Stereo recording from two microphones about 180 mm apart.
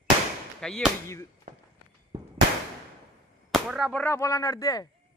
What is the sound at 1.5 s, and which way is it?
Walk, 45° right (ahead or behind).